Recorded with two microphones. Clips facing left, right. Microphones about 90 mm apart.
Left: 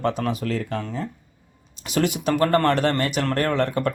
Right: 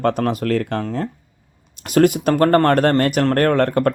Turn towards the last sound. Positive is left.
turn(degrees=-50)  # may be behind; listen again after turning